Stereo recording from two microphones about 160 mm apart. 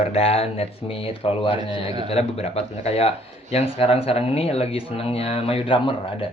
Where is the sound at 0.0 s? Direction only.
40° left (ahead or behind).